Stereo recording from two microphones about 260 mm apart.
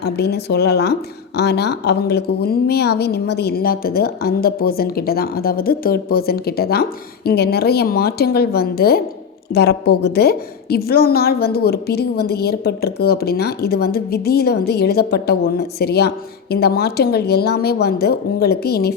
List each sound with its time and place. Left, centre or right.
0.0 s a woman's voice: left